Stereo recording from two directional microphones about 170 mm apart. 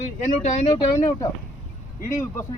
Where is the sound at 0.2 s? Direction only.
45° left (ahead or behind).